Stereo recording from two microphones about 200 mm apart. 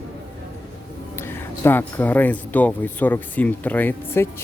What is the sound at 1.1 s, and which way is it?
Speech, 10° left (ahead or behind).